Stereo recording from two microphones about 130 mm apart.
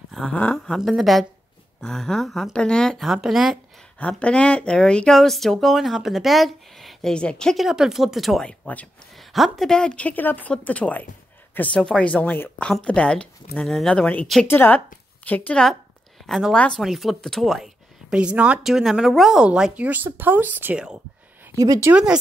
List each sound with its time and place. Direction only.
0.1 s speech: 5° left (ahead or behind)
0.7 s speech: centre (ahead or behind)
4.0 s speech: 10° left (ahead or behind)
14.5 s speech: 15° left (ahead or behind); by 21.0 s 10° right (ahead or behind)
21.5 s speech: 25° right (ahead or behind)
21.9 s speech: 5° right (ahead or behind)